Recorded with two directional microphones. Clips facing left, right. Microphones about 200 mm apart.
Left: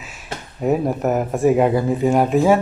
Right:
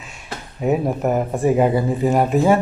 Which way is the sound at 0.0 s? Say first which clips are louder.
Left 1 dB; 5° left (ahead or behind).